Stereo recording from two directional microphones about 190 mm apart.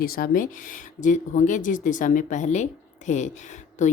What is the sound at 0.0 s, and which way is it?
A woman's voice, 50° left (ahead or behind).